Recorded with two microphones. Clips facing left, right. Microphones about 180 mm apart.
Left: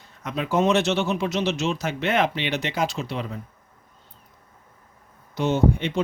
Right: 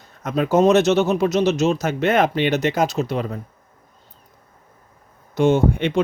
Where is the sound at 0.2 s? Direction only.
45° right (ahead or behind).